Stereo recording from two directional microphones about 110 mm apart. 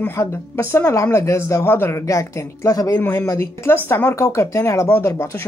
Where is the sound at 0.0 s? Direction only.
25° left (ahead or behind).